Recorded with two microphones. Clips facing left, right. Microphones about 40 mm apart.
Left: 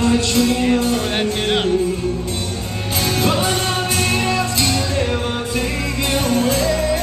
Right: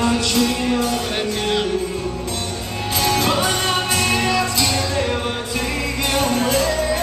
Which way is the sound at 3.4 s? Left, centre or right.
Centre.